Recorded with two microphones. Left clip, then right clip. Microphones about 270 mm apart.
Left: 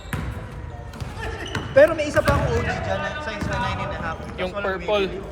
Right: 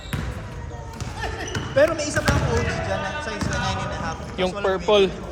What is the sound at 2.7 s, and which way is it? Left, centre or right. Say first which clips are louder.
Speech: even; centre.